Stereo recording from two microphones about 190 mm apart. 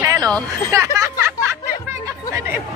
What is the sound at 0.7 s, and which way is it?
Speech, 15° right (ahead or behind).